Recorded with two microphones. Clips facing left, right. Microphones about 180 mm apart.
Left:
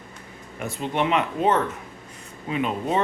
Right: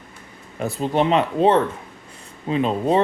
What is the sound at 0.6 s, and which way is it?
Speech, 35° right (ahead or behind).